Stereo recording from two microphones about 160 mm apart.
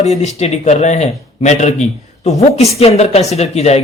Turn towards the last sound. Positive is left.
turn(degrees=40)  # may be behind; listen again after turning